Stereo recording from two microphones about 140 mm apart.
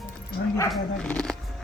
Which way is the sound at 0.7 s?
10° left (ahead or behind).